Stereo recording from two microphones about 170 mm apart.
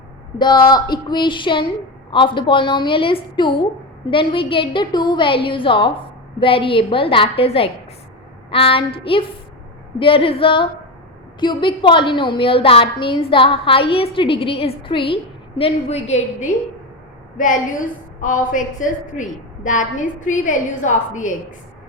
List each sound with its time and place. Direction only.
0.3 s a woman's voice: 25° left (ahead or behind); by 21.3 s 45° left (ahead or behind)